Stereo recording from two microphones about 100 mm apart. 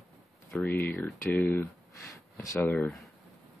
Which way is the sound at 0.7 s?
20° left (ahead or behind).